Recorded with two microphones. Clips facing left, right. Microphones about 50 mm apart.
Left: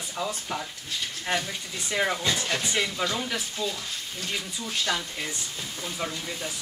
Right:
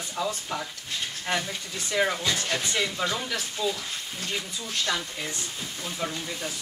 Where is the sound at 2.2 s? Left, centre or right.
Centre.